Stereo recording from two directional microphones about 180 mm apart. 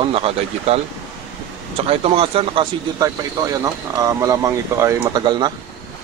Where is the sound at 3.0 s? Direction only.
20° right (ahead or behind).